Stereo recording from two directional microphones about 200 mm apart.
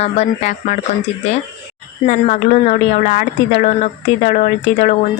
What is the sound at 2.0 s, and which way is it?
Speech, 35° left (ahead or behind).